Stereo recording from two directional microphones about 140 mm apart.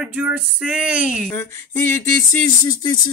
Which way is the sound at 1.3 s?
15° left (ahead or behind).